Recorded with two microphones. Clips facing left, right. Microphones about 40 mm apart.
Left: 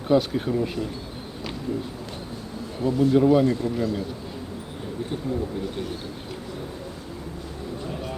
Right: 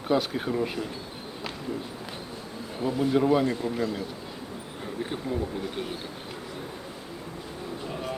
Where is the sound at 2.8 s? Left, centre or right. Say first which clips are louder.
Left 5 dB; centre.